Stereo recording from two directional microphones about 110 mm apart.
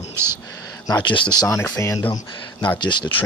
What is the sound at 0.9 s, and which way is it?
Speech, 45° left (ahead or behind).